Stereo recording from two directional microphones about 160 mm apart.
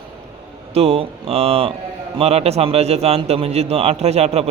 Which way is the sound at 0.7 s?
40° right (ahead or behind).